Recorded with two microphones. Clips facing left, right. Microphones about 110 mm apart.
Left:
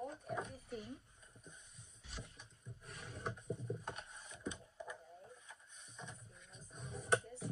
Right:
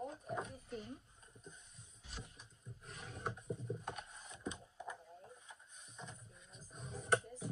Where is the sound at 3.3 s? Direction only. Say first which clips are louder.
Even; centre (ahead or behind).